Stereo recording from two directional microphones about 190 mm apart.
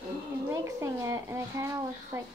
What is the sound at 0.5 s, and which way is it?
Speech, 15° right (ahead or behind).